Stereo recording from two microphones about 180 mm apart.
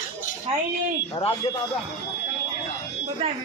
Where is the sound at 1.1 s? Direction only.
35° left (ahead or behind).